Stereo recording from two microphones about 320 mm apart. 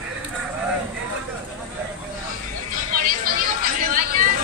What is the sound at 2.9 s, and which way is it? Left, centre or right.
Chatter, right.